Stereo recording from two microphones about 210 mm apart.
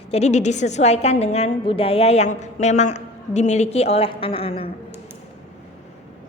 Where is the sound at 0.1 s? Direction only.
30° left (ahead or behind).